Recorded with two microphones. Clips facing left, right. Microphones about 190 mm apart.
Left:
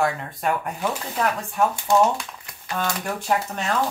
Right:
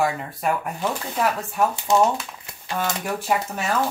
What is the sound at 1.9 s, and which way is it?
Speech, 20° right (ahead or behind).